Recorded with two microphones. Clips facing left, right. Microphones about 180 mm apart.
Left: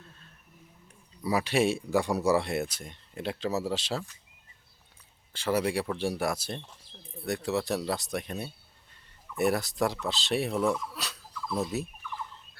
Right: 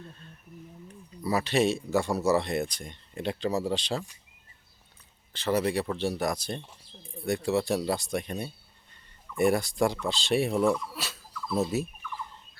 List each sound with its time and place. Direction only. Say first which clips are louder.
1.2 s speech: right 1 dB; 10° left (ahead or behind)
5.3 s speech: right 1 dB; 10° left (ahead or behind)